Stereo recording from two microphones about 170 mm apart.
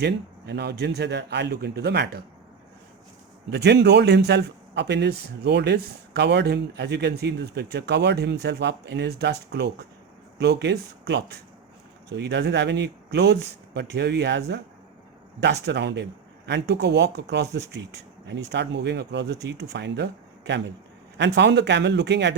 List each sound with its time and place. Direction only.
0.0 s a man's voice: 85° right
3.5 s a man's voice: 80° right
16.5 s a man's voice: 75° right (ahead or behind)